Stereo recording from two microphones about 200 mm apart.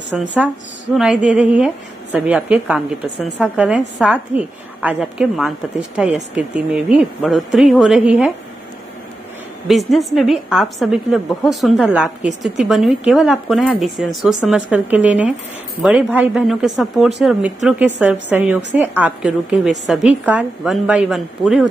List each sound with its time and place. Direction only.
0.1 s a woman's voice: centre (ahead or behind)
9.7 s a woman's voice: centre (ahead or behind)